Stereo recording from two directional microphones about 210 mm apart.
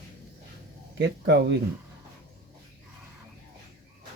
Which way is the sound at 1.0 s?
55° right (ahead or behind).